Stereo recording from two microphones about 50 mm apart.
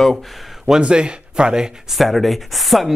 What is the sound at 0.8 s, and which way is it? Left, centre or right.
Speech, centre.